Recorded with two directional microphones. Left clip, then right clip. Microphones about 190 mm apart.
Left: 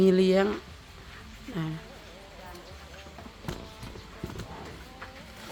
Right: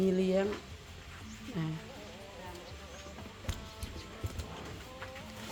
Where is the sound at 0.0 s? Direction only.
35° left (ahead or behind).